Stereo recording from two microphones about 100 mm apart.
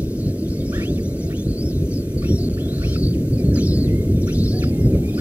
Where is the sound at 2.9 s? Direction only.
15° right (ahead or behind).